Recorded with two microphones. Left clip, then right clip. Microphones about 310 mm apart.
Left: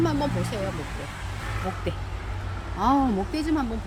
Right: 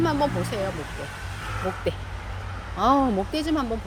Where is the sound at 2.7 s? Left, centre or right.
Right.